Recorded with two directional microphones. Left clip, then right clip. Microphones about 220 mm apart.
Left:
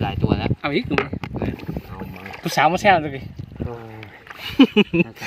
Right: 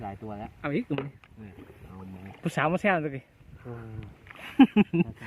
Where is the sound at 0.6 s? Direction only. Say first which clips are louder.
Left 8 dB; 15° left (ahead or behind).